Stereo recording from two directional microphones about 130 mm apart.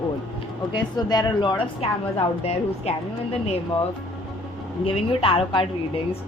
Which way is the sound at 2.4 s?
50° left (ahead or behind).